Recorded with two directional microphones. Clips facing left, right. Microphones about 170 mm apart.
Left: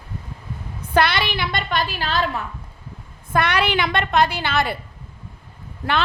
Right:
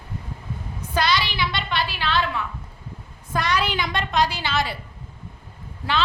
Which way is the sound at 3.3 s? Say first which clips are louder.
Left 4 dB; 65° left (ahead or behind).